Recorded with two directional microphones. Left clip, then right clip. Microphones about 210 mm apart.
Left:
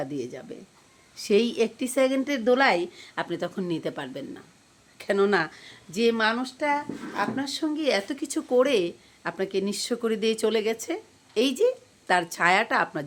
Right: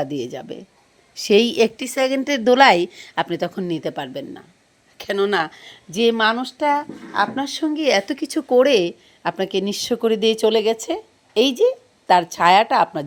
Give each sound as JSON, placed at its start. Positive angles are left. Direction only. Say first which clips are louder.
{"t": 0.0, "sound": "speech", "louder": "right 7 dB", "side_deg": -25}